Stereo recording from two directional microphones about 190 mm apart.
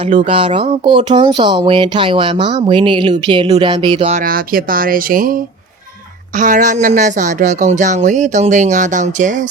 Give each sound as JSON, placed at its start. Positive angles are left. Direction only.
{"t": 0.2, "sound": "speech", "side_deg": -30}
{"t": 4.1, "sound": "speech", "side_deg": -50}